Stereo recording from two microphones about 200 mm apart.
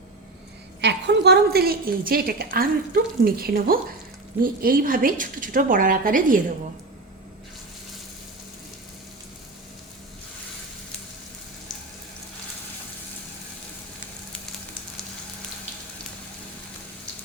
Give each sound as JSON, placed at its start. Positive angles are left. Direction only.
{"t": 0.8, "sound": "a woman's voice", "side_deg": -60}